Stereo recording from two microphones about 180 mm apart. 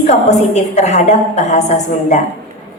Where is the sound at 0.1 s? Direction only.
40° left (ahead or behind).